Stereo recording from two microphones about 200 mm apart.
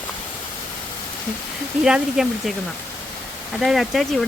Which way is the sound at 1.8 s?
Centre (ahead or behind).